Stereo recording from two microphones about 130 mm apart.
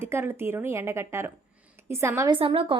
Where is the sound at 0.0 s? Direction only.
20° right (ahead or behind).